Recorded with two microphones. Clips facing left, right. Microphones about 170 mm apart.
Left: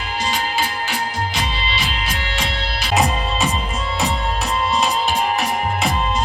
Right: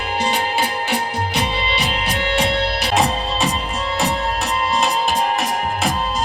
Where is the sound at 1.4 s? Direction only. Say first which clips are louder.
Right 3 dB; 60° right (ahead or behind).